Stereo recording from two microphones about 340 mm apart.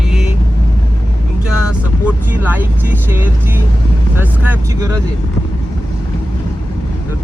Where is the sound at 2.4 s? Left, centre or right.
Centre.